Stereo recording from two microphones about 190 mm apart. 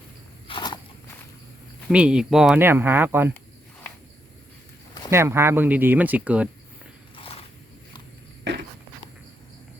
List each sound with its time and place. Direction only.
0.4 s walk: 25° left (ahead or behind)
1.9 s speech: 5° right (ahead or behind)
5.1 s speech: 15° right (ahead or behind)
7.2 s a sound: 30° left (ahead or behind)